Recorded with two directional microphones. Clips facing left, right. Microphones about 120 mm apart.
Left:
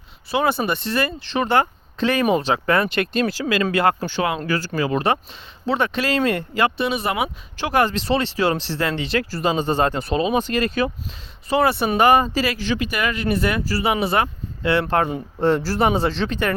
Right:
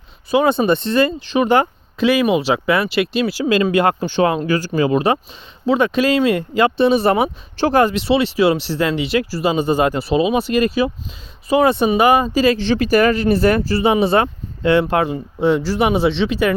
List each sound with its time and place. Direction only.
0.3 s speech: 20° right (ahead or behind)
7.9 s speech: 10° right (ahead or behind)
15.1 s speech: centre (ahead or behind)